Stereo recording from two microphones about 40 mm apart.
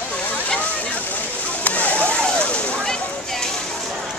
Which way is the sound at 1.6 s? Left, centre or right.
Left.